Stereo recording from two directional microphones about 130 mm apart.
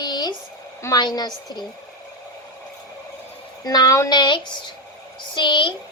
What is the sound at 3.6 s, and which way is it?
A woman's voice, 30° left (ahead or behind).